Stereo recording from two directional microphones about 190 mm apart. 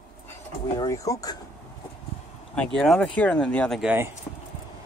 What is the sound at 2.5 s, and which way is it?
Speech, centre (ahead or behind).